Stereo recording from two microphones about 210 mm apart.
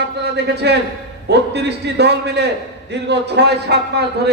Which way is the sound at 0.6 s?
55° right (ahead or behind).